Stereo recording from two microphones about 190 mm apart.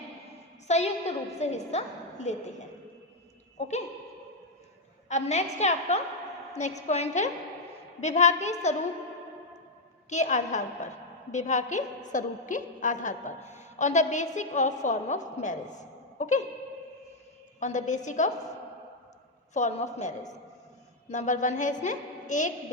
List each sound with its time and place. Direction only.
0.7 s a woman's voice: 35° left (ahead or behind)
5.0 s a woman's voice: 35° left (ahead or behind)
10.1 s a woman's voice: 40° left (ahead or behind)
17.6 s a woman's voice: 40° left (ahead or behind)
19.5 s a woman's voice: 40° left (ahead or behind)